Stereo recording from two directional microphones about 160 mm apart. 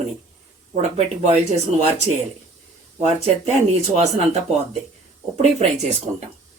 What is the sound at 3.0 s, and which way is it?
Speech, 40° right (ahead or behind).